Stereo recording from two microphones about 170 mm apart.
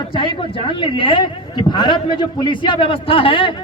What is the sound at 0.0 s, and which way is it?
A man's voice, 30° left (ahead or behind).